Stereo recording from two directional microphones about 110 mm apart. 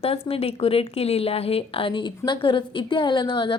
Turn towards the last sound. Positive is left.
turn(degrees=45)  # may be behind; listen again after turning